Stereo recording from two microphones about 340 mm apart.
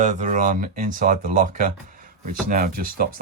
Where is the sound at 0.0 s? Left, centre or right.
Right.